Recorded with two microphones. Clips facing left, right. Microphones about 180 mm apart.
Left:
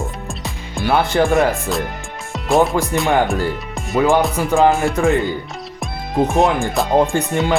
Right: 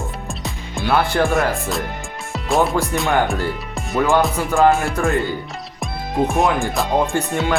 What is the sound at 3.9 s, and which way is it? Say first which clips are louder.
Music: left 2 dB; 15° left (ahead or behind).